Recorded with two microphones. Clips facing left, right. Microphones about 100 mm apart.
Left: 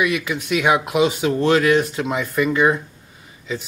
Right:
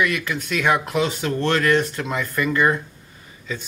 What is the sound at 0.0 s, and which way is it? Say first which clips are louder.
Speech: left 2 dB; 5° left (ahead or behind).